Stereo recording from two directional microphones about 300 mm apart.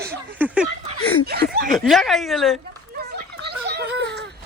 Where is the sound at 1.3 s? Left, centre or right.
Right.